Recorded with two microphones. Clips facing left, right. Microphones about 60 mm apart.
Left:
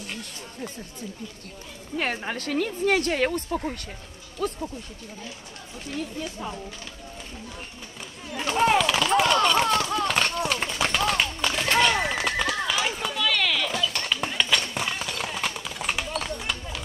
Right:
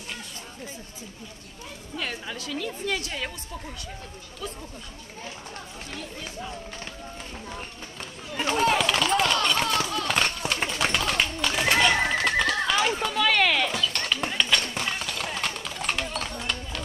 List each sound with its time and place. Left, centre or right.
2.0 s a woman's voice: left
8.7 s a sound: centre
11.7 s neigh: centre
12.2 s horse: centre
13.1 s a sound: right
13.7 s run: centre